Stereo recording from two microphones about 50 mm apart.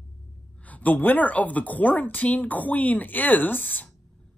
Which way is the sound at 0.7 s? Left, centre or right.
Left.